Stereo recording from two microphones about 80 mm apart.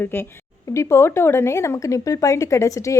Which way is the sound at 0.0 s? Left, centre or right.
Left.